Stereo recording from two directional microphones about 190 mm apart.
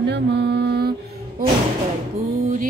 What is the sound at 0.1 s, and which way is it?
Mantra, 60° right (ahead or behind).